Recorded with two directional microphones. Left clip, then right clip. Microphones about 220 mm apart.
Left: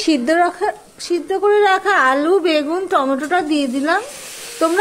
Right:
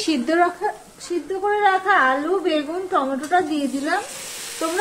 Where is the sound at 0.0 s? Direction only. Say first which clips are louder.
Left 4 dB; 35° left (ahead or behind).